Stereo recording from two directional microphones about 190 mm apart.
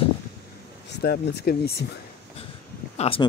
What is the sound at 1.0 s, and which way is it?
Speech, 55° left (ahead or behind).